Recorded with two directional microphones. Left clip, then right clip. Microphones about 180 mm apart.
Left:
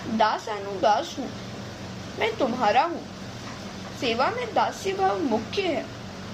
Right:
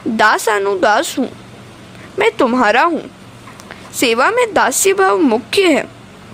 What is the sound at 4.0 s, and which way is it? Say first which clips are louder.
A woman's voice: right 13 dB; 55° right (ahead or behind).